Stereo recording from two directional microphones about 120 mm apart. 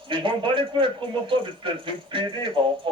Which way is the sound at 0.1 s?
45° right (ahead or behind).